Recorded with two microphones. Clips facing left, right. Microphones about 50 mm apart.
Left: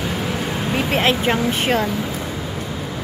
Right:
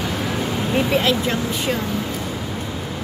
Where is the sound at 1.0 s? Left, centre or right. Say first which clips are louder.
Left 2 dB; left.